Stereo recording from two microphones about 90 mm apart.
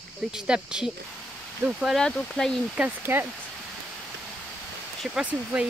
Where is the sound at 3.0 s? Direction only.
25° right (ahead or behind).